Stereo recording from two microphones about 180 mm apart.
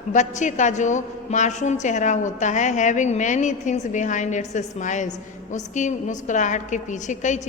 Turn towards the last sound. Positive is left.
turn(degrees=40)  # may be behind; listen again after turning